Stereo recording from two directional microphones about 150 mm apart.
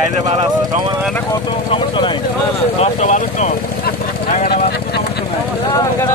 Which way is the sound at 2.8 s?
50° left (ahead or behind).